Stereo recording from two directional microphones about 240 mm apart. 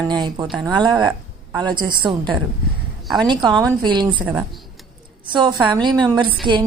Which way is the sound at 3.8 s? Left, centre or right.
Centre.